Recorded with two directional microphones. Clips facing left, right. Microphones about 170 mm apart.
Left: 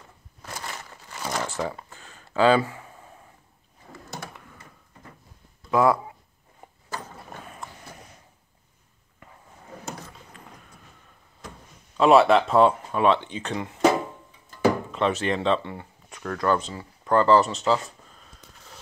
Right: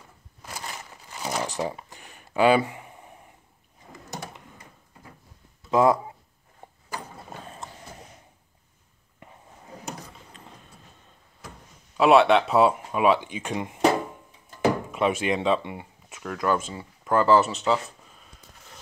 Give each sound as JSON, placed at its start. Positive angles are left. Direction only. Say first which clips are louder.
{"t": 1.1, "sound": "a sound", "louder": "even", "side_deg": -15}
{"t": 3.9, "sound": "computer keyboard", "louder": "right 1 dB", "side_deg": -20}
{"t": 5.7, "sound": "speech", "louder": "right 1 dB", "side_deg": -20}
{"t": 7.4, "sound": "horse", "louder": "even", "side_deg": -25}
{"t": 9.8, "sound": "a sound", "louder": "even", "side_deg": -20}
{"t": 12.0, "sound": "speech", "louder": "left 1 dB", "side_deg": 0}
{"t": 14.9, "sound": "speech", "louder": "even", "side_deg": -10}